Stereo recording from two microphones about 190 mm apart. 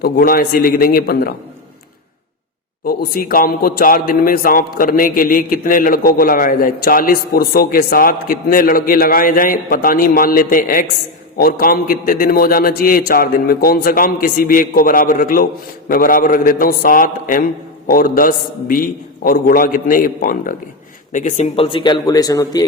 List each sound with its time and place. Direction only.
0.0 s a man's voice: 50° left (ahead or behind)
2.8 s a man's voice: 50° left (ahead or behind); by 22.6 s 20° left (ahead or behind)